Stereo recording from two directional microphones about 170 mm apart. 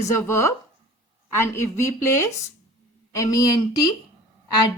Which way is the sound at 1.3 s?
15° left (ahead or behind).